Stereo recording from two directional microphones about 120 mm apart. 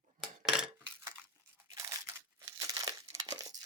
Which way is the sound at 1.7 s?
25° right (ahead or behind).